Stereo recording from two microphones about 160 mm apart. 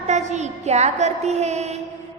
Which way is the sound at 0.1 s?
45° right (ahead or behind).